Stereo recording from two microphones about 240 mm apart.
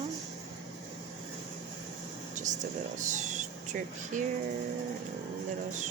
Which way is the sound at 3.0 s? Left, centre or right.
Right.